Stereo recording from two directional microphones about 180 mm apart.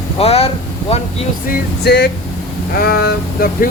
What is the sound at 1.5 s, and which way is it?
Speech, 60° left (ahead or behind).